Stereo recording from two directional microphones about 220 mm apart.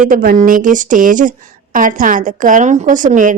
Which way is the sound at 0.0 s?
40° right (ahead or behind).